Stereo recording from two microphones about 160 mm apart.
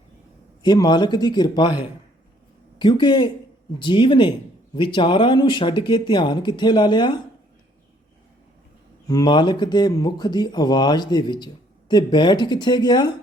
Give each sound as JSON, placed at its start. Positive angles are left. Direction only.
{"t": 0.6, "sound": "speech", "side_deg": 25}
{"t": 9.0, "sound": "speech", "side_deg": 25}